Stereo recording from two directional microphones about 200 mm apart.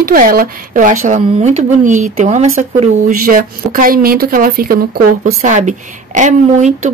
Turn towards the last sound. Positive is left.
turn(degrees=-40)  # may be behind; listen again after turning